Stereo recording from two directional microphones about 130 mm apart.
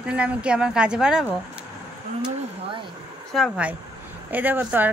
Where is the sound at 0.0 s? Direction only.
10° right (ahead or behind).